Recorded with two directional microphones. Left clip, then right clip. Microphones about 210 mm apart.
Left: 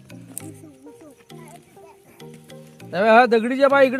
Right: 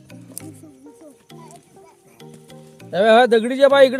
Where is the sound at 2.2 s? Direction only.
Centre (ahead or behind).